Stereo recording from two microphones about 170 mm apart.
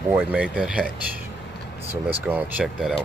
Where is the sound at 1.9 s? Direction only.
10° right (ahead or behind).